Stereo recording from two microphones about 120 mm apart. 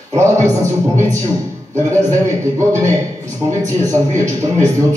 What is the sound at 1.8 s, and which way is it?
A man's voice, 25° right (ahead or behind).